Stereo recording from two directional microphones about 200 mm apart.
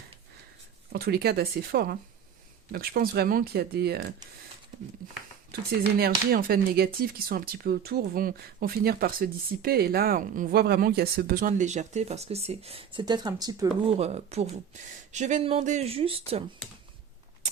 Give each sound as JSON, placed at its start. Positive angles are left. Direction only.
{"t": 0.9, "sound": "speech", "side_deg": -50}
{"t": 5.5, "sound": "speech", "side_deg": -50}
{"t": 14.0, "sound": "speech", "side_deg": -35}